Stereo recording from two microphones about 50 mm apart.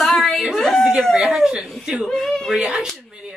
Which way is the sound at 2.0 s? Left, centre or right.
Centre.